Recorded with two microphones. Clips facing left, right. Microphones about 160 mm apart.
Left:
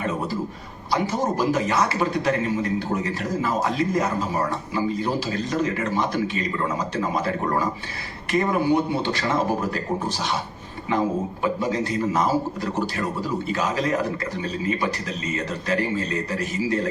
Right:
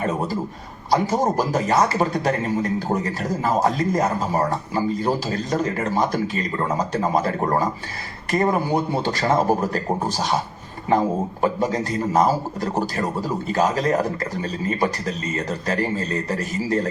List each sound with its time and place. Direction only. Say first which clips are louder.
0.9 s a man's voice: right 4 dB; 40° right (ahead or behind)